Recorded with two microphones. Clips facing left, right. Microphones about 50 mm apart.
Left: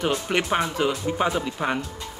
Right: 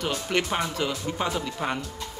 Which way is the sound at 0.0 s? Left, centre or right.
Centre.